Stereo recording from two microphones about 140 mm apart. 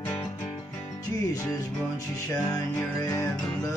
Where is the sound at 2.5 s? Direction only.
25° left (ahead or behind).